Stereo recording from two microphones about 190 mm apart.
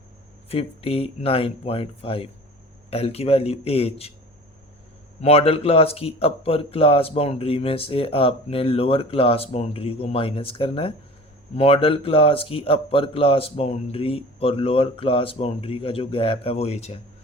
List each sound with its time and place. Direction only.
0.4 s a man's voice: 30° left (ahead or behind)
5.2 s a man's voice: 30° left (ahead or behind)